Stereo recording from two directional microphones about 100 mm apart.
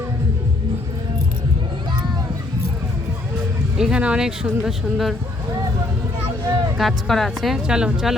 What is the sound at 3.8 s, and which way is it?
Speech, 10° right (ahead or behind).